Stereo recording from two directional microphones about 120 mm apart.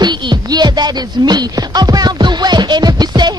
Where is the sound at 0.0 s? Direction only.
35° right (ahead or behind).